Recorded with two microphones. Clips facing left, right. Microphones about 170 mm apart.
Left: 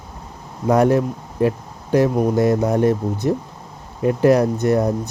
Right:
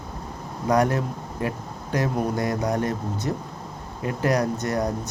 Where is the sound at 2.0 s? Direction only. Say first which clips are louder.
Left 6 dB; 20° left (ahead or behind).